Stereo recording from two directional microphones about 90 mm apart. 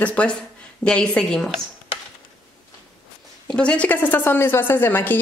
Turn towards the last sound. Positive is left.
turn(degrees=25)  # may be behind; listen again after turning